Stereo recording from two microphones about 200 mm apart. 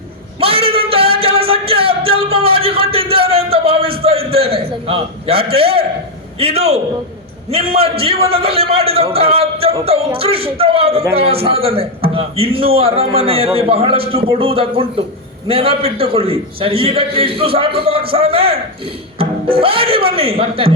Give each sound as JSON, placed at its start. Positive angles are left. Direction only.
{"t": 0.3, "sound": "singing", "side_deg": -30}
{"t": 6.4, "sound": "a man's voice", "side_deg": -30}